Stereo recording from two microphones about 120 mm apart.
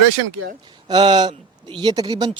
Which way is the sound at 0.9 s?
40° right (ahead or behind).